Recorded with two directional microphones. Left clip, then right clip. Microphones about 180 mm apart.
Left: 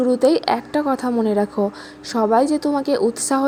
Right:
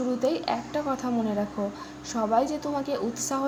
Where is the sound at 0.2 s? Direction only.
40° left (ahead or behind).